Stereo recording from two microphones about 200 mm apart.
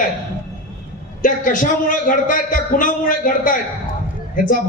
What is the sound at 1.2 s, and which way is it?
A man's voice, 40° left (ahead or behind).